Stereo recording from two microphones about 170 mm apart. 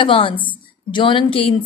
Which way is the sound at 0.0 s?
30° left (ahead or behind).